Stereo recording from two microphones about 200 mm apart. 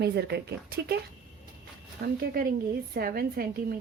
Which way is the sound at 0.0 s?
55° right (ahead or behind).